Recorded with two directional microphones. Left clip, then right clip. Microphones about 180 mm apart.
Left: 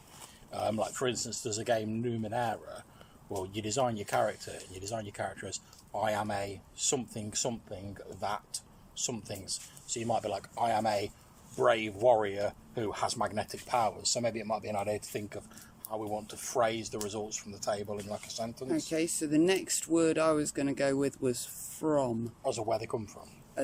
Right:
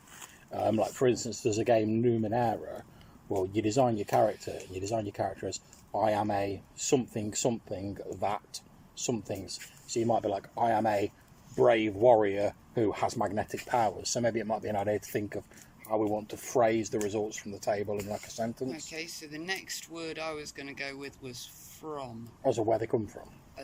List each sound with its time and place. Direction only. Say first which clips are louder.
0.5 s a sound: right 4 dB; 15° right (ahead or behind)
0.9 s speech: right 5 dB; 15° right (ahead or behind)
14.7 s speech: right 5 dB; 5° left (ahead or behind)
15.1 s speech: right 5 dB; 15° right (ahead or behind)
18.9 s speech: left 8 dB; 50° left (ahead or behind)
22.4 s speech: right 5 dB; 15° right (ahead or behind)